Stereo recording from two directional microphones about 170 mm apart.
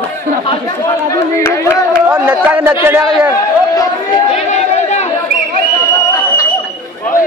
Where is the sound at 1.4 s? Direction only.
15° left (ahead or behind).